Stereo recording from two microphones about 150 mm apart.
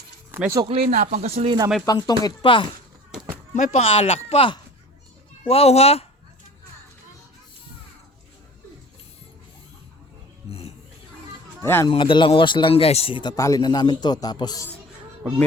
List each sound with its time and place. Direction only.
0.3 s a sound: 10° right (ahead or behind)
0.5 s speech: 35° right (ahead or behind)
0.9 s speech: 65° right (ahead or behind)
1.5 s speech: 25° right (ahead or behind)
1.9 s speech: 25° left (ahead or behind)
3.5 s speech: 50° left (ahead or behind)
11.6 s speech: 15° left (ahead or behind)
11.9 s speech: 35° left (ahead or behind)